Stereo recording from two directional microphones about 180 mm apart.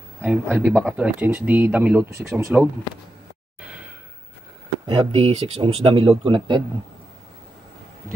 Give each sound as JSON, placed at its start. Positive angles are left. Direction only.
{"t": 0.2, "sound": "speech", "side_deg": -10}
{"t": 4.8, "sound": "speech", "side_deg": -30}